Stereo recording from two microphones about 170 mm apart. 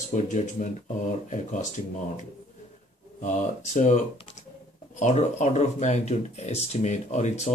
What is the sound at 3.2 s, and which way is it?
Speech, 45° left (ahead or behind).